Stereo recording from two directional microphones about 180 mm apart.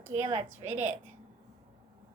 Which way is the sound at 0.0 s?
20° right (ahead or behind).